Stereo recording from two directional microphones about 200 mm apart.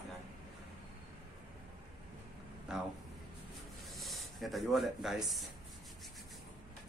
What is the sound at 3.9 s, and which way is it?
Speech, centre (ahead or behind).